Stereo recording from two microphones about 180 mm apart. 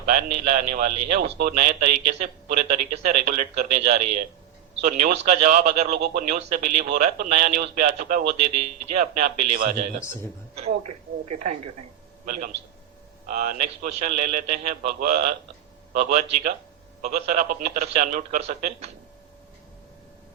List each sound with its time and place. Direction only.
0.0 s a man's voice: 45° right (ahead or behind)
5.9 s speech: 60° right (ahead or behind)
6.2 s a man's voice: 45° right (ahead or behind)